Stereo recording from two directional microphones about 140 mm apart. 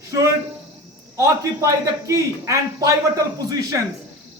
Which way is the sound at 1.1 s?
20° right (ahead or behind).